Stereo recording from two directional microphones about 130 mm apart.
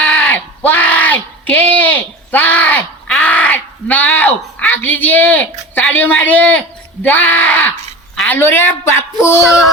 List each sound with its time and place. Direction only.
0.0 s a sound: 10° left (ahead or behind)
7.0 s a woman's voice: 15° left (ahead or behind)
9.4 s music: centre (ahead or behind)